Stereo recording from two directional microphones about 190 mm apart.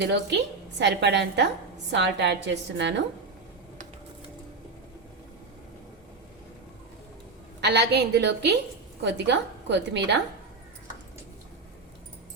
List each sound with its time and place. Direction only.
0.0 s a woman's voice: 65° right (ahead or behind)
7.6 s a woman's voice: 65° right (ahead or behind)